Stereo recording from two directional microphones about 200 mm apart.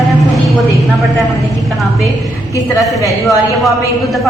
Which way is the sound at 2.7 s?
15° left (ahead or behind).